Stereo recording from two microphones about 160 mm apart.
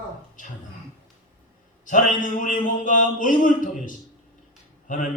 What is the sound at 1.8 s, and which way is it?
Mantra, 55° left (ahead or behind).